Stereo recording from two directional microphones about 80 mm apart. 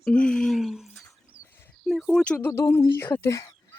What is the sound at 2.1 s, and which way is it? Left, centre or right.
Speech, centre.